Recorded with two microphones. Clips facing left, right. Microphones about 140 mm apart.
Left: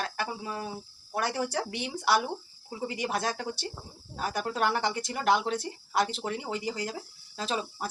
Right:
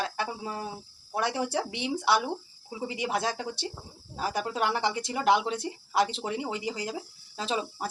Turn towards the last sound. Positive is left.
turn(degrees=-20)  # may be behind; listen again after turning